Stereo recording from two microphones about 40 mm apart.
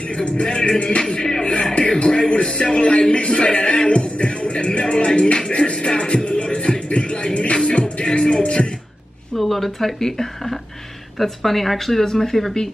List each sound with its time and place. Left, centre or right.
0.1 s speech: left
5.5 s music: left
9.4 s speech: centre